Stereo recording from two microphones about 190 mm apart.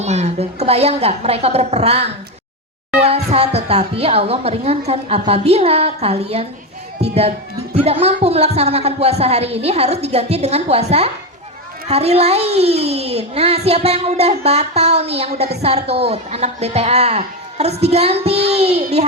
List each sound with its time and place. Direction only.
0.0 s a child's voice: 35° right (ahead or behind)